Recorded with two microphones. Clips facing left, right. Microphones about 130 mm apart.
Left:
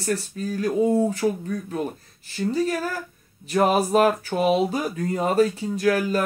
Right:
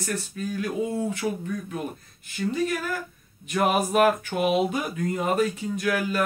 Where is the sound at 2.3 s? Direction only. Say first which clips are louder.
Left 3 dB; 35° left (ahead or behind).